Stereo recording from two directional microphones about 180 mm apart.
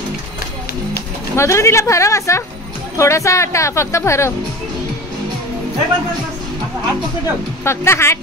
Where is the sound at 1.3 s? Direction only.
15° left (ahead or behind).